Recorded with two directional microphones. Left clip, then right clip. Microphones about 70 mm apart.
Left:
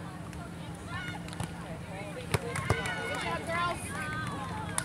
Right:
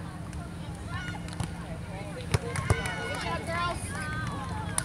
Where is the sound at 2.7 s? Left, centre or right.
Right.